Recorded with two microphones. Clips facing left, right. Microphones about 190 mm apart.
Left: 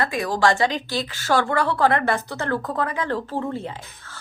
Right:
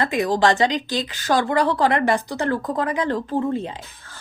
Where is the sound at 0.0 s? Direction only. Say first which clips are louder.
Right 2 dB; 20° right (ahead or behind).